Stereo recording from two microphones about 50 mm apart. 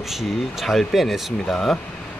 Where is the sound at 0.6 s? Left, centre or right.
Centre.